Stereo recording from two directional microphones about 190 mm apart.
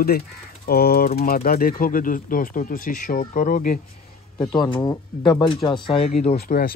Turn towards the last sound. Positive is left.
turn(degrees=55)  # may be behind; listen again after turning